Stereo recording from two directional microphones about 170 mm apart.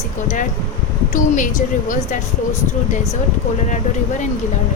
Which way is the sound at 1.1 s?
50° left (ahead or behind).